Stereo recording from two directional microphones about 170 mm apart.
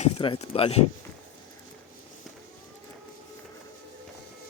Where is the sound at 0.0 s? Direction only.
35° left (ahead or behind).